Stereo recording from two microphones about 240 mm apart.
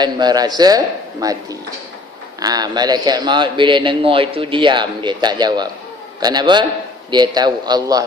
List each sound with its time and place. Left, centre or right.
0.0 s a man's voice: centre